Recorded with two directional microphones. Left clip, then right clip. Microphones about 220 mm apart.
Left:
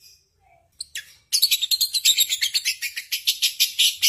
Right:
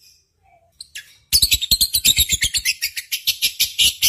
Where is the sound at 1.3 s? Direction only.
15° right (ahead or behind).